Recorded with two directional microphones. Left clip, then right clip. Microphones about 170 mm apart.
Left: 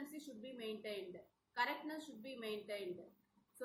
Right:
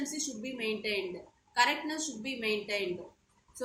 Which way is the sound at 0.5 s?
45° right (ahead or behind).